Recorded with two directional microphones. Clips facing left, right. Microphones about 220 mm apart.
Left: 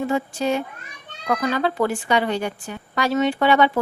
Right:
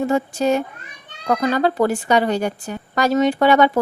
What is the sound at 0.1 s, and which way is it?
A woman's voice, 45° right (ahead or behind).